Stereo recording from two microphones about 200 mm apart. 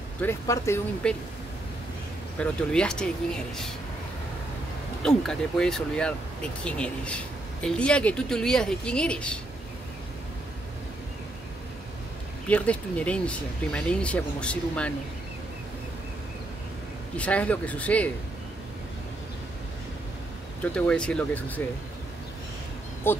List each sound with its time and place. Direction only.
0.2 s speech: 10° left (ahead or behind)
2.3 s speech: 5° left (ahead or behind)
5.0 s speech: 5° left (ahead or behind)
12.4 s speech: 5° left (ahead or behind)
17.2 s speech: 5° left (ahead or behind)
20.6 s speech: 5° left (ahead or behind)
23.0 s speech: 10° left (ahead or behind)